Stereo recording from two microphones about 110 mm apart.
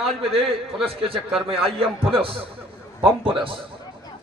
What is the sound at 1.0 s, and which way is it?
A man's voice, 60° right (ahead or behind).